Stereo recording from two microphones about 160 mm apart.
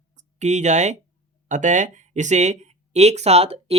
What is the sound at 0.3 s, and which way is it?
Speech, 45° right (ahead or behind).